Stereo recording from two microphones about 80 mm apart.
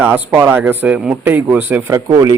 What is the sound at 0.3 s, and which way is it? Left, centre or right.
Speech, right.